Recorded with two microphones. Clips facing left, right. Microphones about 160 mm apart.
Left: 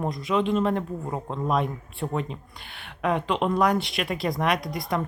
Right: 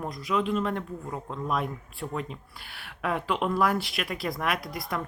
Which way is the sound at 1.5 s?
Centre (ahead or behind).